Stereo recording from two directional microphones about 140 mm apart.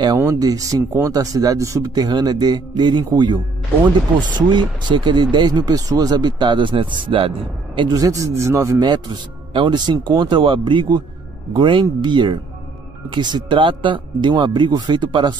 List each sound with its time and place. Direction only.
0.2 s speech: 25° right (ahead or behind)